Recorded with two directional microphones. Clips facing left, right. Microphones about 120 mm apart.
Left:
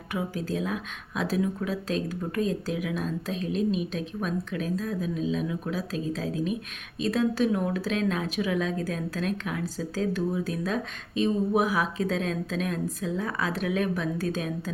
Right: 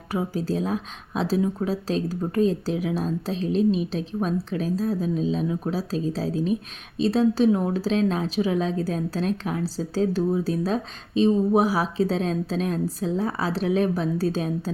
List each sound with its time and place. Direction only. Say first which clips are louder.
0.1 s speech: right 4 dB; 30° right (ahead or behind)